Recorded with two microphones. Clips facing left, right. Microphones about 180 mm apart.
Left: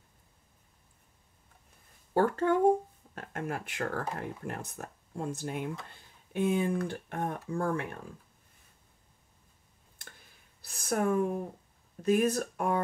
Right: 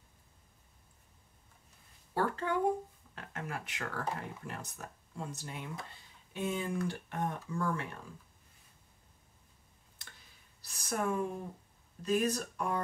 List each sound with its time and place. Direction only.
2.1 s speech: 45° left (ahead or behind)
10.0 s a sound: 50° left (ahead or behind)
12.0 s speech: 55° left (ahead or behind)